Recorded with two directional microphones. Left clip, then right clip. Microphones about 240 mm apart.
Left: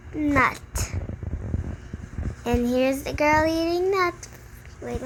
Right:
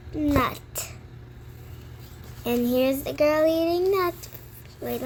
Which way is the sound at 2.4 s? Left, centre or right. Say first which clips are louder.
Even; centre.